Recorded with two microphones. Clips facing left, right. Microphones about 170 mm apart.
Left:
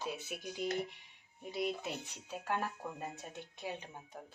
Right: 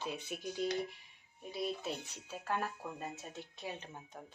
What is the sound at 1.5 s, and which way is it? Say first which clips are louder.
A woman's voice: left 1 dB; 20° left (ahead or behind).